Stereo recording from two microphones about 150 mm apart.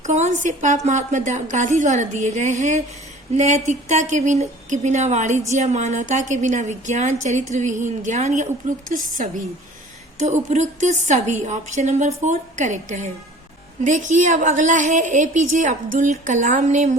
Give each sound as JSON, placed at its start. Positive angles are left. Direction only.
{"t": 0.0, "sound": "a woman's voice", "side_deg": -50}
{"t": 10.2, "sound": "a woman's voice", "side_deg": -55}